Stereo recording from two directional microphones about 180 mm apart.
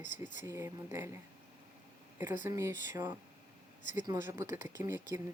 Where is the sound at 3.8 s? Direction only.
45° left (ahead or behind).